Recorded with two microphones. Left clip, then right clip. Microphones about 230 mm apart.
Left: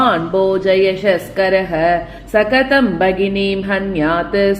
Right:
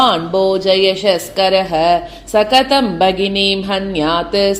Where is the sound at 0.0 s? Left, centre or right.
Right.